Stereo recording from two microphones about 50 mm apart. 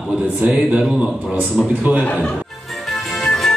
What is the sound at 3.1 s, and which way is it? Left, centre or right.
Music, centre.